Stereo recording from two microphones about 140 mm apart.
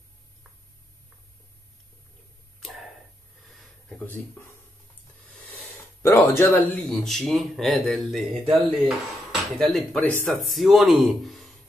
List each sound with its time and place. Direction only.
6.0 s speech: 20° left (ahead or behind)
6.9 s speech: centre (ahead or behind)
8.8 s dishes: centre (ahead or behind)
10.2 s speech: centre (ahead or behind)